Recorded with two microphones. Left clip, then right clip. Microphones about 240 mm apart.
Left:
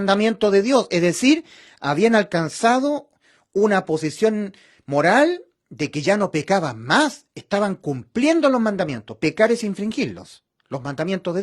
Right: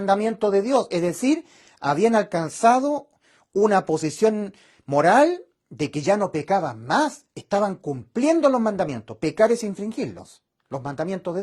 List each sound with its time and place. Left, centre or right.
0.1 s speech: left